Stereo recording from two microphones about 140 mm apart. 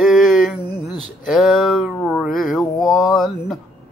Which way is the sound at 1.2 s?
Centre (ahead or behind).